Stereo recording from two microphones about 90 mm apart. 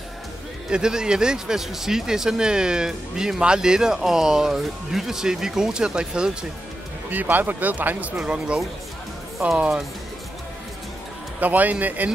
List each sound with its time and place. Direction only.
0.7 s speech: 10° right (ahead or behind)
7.1 s speech: 20° right (ahead or behind)
11.3 s speech: 20° right (ahead or behind)